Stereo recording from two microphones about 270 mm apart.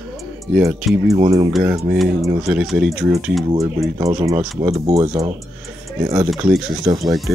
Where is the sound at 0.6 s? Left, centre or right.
Centre.